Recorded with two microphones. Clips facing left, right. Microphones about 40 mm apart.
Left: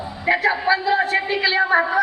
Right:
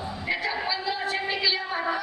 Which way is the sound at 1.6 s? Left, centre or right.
Left.